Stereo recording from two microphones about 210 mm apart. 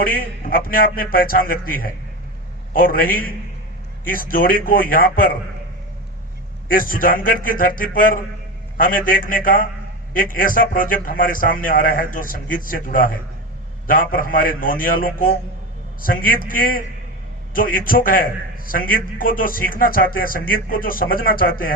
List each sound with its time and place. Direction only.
0.0 s a man's voice: 45° left (ahead or behind)
6.7 s a man's voice: 40° left (ahead or behind)